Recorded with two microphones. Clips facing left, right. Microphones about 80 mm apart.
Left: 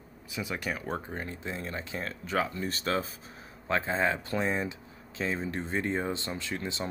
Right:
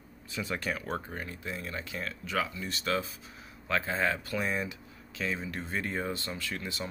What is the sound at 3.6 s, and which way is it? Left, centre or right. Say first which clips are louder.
Speech: left 2 dB; left.